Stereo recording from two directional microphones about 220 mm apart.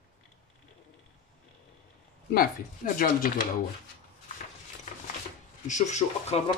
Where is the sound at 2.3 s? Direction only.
40° left (ahead or behind).